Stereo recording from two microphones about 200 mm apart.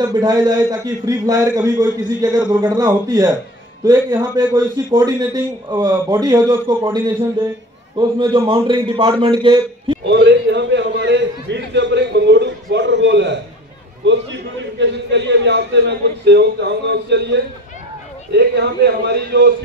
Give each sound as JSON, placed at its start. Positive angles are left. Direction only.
{"t": 0.0, "sound": "a man's voice", "side_deg": -20}
{"t": 10.0, "sound": "a man's voice", "side_deg": -60}